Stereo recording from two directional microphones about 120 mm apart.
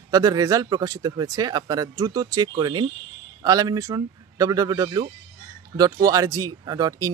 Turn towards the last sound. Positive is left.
turn(degrees=-30)  # may be behind; listen again after turning